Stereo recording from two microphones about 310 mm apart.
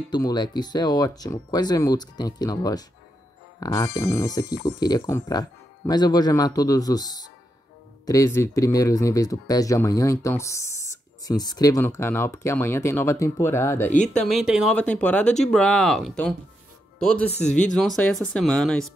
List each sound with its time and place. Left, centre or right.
0.1 s speech: centre
17.3 s speech: left
17.7 s speech: centre